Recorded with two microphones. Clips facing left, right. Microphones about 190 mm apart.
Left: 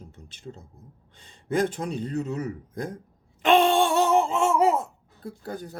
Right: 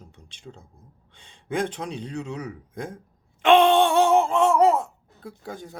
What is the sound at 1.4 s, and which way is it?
Speech, 40° left (ahead or behind).